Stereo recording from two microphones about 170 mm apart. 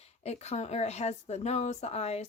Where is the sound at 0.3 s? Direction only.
40° left (ahead or behind).